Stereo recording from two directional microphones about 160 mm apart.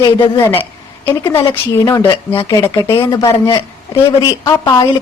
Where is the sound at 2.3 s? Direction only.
20° left (ahead or behind).